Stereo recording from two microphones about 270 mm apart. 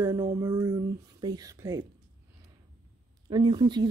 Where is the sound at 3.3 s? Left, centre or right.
Centre.